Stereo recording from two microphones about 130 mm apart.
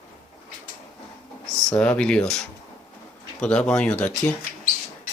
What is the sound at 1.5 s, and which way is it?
Speech, 5° left (ahead or behind).